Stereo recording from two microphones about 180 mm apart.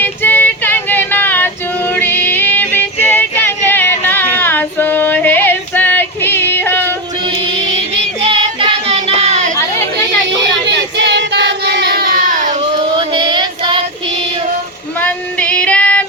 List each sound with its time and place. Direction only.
0.0 s music: 10° left (ahead or behind)
3.1 s a sound: 10° left (ahead or behind)
8.3 s music: 30° right (ahead or behind)
9.2 s a sound: 40° right (ahead or behind)
10.4 s child singing: 75° right (ahead or behind); by 12.5 s 45° right (ahead or behind)
13.0 s child singing: 25° right (ahead or behind)
15.0 s female singing: 5° left (ahead or behind)